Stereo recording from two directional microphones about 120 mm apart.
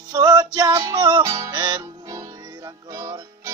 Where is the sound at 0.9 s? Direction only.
40° right (ahead or behind).